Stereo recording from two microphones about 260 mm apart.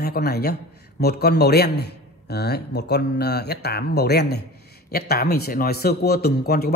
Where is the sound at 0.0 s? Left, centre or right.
Left.